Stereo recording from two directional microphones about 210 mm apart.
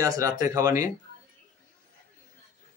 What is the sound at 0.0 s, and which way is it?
Speech, 15° right (ahead or behind).